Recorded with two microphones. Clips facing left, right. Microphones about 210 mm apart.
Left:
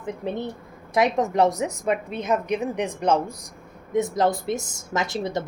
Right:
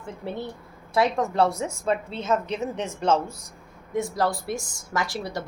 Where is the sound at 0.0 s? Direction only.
20° left (ahead or behind).